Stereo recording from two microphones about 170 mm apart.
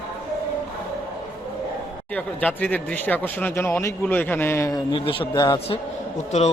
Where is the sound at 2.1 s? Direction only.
10° left (ahead or behind).